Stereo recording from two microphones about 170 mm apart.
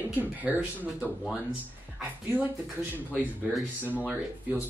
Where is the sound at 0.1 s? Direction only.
10° right (ahead or behind).